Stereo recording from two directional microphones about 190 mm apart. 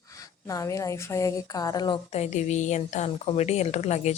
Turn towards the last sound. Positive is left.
turn(degrees=35)  # may be behind; listen again after turning